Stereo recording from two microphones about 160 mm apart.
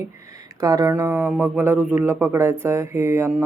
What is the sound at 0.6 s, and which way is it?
Speech, 20° right (ahead or behind).